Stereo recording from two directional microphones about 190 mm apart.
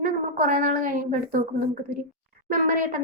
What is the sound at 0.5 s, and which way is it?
A woman's voice, 50° right (ahead or behind).